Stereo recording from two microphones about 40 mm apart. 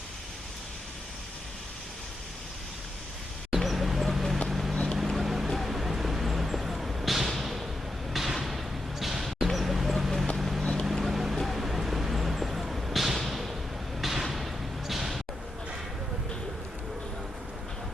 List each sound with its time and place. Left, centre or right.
3.5 s a sound: centre
4.4 s vehicle: centre
4.7 s boat: centre
5.0 s vehicle: centre
8.1 s basketball bounce: centre
10.3 s vehicle: centre
10.6 s boat: centre
10.8 s vehicle: centre
14.0 s basketball bounce: centre